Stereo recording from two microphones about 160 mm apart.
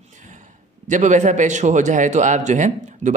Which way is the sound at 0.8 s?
50° right (ahead or behind).